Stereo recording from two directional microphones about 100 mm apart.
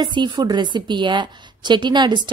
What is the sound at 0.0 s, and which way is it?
A woman's voice, 50° right (ahead or behind).